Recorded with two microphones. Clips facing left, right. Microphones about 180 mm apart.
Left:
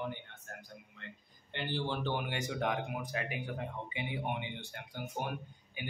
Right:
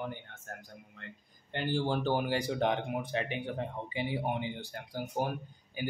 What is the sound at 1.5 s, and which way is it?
Speech, 45° right (ahead or behind).